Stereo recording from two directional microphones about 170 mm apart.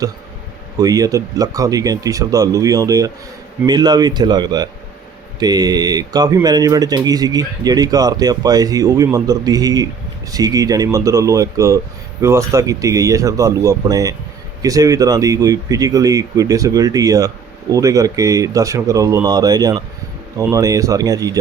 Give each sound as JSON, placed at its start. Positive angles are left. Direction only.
{"t": 0.8, "sound": "speech", "side_deg": -20}